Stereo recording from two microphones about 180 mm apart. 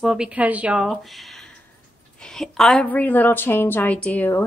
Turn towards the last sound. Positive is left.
turn(degrees=10)  # may be behind; listen again after turning